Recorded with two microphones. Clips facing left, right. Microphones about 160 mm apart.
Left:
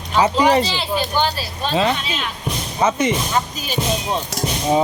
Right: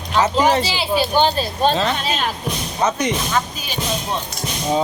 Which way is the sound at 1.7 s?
30° right (ahead or behind).